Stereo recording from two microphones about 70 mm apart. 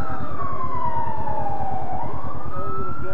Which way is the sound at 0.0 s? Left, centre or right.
Centre.